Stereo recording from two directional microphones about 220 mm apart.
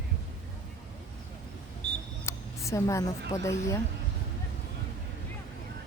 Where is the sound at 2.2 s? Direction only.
15° left (ahead or behind).